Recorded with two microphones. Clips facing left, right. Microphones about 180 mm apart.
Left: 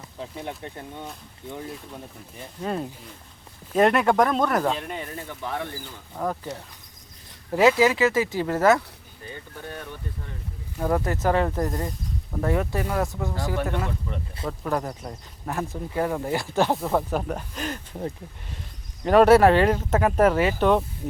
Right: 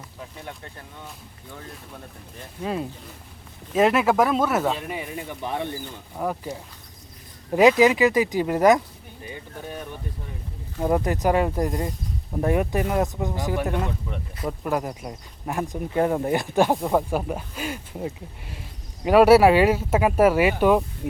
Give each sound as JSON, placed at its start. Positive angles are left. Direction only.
{"t": 0.2, "sound": "speech", "side_deg": 20}
{"t": 2.6, "sound": "speech", "side_deg": -5}
{"t": 6.1, "sound": "speech", "side_deg": -10}
{"t": 7.5, "sound": "speech", "side_deg": -15}